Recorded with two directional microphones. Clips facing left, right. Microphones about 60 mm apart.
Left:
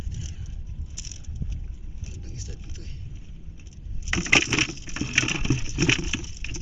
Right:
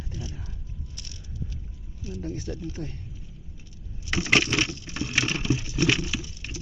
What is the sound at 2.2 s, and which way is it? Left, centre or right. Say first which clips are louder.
Speech: right 15 dB; right.